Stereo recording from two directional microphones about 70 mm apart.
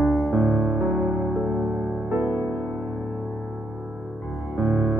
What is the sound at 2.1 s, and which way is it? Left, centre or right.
Music, right.